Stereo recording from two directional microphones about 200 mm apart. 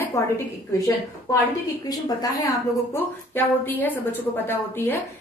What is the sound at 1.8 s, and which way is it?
A woman's voice, 20° left (ahead or behind).